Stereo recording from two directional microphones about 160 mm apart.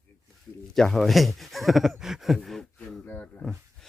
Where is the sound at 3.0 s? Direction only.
10° left (ahead or behind).